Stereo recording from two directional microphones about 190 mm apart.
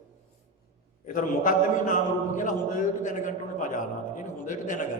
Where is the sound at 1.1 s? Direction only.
45° left (ahead or behind).